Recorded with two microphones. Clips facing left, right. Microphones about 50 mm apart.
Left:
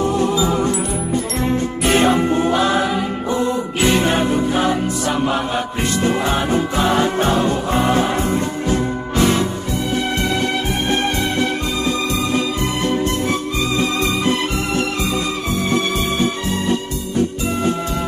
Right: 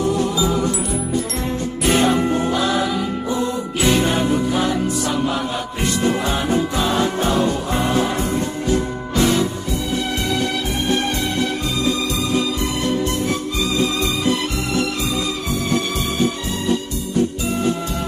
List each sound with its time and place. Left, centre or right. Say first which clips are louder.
1.9 s music: left 1 dB; left
3.8 s music: left 1 dB; left
6.3 s music: left 2 dB; left
12.8 s music: left 2 dB; left